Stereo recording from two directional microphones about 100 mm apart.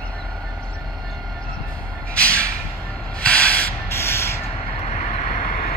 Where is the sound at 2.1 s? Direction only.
10° left (ahead or behind).